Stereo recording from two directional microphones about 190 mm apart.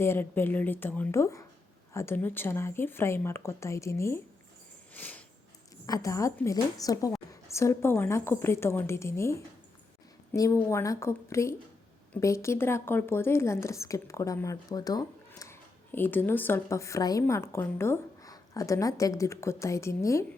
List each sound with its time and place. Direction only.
0.0 s a woman's voice: 10° left (ahead or behind)
4.9 s a sound: 10° left (ahead or behind)
5.8 s a woman's voice: 15° left (ahead or behind)